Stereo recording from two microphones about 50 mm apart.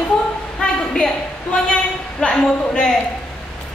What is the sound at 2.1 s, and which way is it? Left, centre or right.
Speech, centre.